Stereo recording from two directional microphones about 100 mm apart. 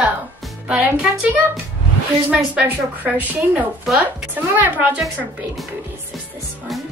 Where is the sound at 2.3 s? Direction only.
15° right (ahead or behind).